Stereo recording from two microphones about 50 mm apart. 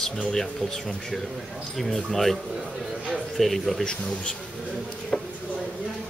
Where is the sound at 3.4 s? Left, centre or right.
Centre.